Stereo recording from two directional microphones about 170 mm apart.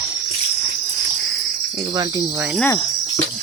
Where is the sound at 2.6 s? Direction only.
15° left (ahead or behind).